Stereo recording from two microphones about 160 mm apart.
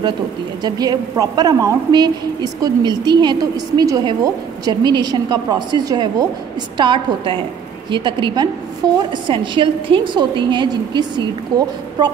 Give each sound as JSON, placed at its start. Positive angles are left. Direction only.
{"t": 0.6, "sound": "a woman's voice", "side_deg": -25}